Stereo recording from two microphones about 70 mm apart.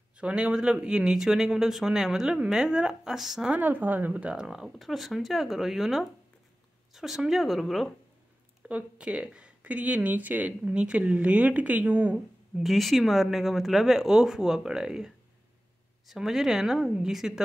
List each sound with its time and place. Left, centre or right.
0.2 s speech: centre
3.5 s speech: right
4.6 s speech: centre
8.6 s speech: centre
12.5 s speech: centre